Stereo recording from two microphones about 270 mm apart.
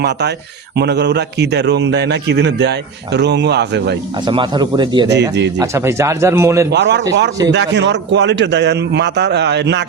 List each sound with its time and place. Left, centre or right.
0.8 s a man's voice: right
4.3 s speech: centre
6.7 s a man's voice: right